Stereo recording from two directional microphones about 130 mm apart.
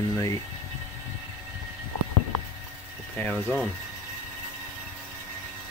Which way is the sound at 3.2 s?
10° left (ahead or behind).